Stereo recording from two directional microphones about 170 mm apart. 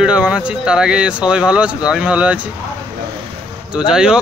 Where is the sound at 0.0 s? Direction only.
5° right (ahead or behind).